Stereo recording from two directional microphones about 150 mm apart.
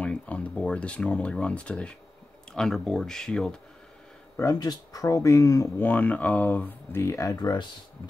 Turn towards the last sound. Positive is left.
turn(degrees=25)  # may be behind; listen again after turning